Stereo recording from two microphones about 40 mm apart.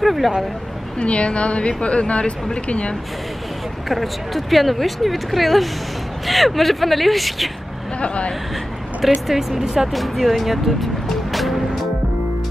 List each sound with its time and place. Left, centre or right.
0.0 s speech: centre
0.9 s speech: left
3.9 s speech: centre
8.0 s speech: left
9.0 s speech: centre
11.3 s music: centre